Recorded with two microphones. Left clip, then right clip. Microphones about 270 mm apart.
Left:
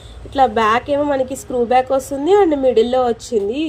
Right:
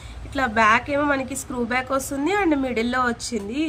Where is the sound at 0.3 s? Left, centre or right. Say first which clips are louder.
Left 4 dB; centre.